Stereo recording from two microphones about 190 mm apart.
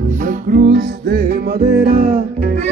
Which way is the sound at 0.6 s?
60° right (ahead or behind).